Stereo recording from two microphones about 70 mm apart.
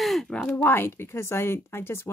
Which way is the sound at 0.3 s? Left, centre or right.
Centre.